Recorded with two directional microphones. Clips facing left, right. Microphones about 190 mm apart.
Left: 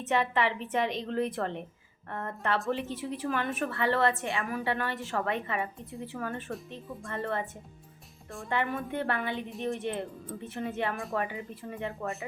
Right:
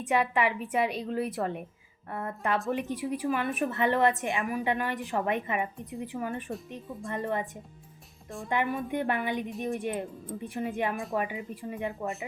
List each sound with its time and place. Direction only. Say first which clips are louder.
0.0 s a woman's voice: right 1 dB; 10° right (ahead or behind)
8.4 s a woman's voice: right 2 dB; 10° right (ahead or behind)